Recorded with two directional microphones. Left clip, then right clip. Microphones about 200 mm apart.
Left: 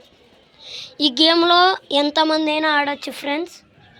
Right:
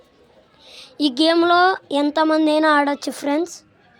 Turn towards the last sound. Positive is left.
turn(degrees=-30)  # may be behind; listen again after turning